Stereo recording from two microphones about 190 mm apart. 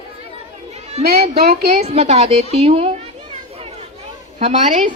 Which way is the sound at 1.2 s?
30° right (ahead or behind).